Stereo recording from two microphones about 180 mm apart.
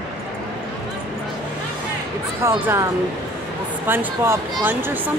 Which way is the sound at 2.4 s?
15° right (ahead or behind).